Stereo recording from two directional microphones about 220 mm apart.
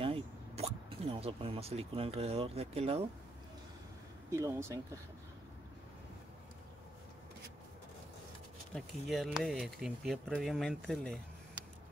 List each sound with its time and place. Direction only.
0.0 s speech: 25° right (ahead or behind)
4.3 s speech: 10° right (ahead or behind)
8.7 s speech: centre (ahead or behind)